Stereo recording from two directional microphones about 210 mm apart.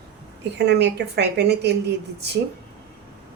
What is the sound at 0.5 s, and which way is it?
Speech, 55° right (ahead or behind).